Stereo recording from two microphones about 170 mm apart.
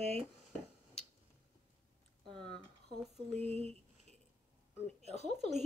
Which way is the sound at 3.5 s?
40° right (ahead or behind).